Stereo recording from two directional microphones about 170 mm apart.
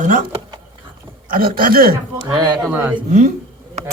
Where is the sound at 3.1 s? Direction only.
45° right (ahead or behind).